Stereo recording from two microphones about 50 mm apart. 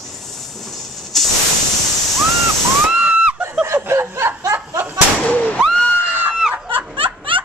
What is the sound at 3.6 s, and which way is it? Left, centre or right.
Snicker, right.